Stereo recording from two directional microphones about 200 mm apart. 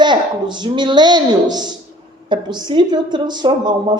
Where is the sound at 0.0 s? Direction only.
20° right (ahead or behind).